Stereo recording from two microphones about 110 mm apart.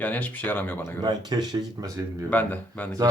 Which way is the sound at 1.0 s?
40° right (ahead or behind).